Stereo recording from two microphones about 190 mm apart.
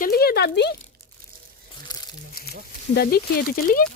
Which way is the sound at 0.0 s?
55° left (ahead or behind).